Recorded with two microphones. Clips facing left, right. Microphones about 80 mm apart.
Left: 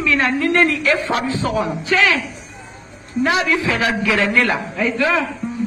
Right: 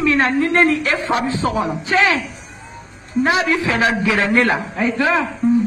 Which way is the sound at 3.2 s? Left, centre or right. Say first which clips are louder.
Right 1 dB; right.